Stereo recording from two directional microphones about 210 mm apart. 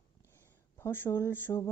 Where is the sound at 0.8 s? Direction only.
10° left (ahead or behind).